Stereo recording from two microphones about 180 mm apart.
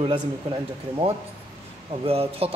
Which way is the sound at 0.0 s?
25° right (ahead or behind).